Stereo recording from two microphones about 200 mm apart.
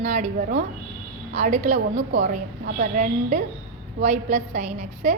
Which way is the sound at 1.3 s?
35° right (ahead or behind).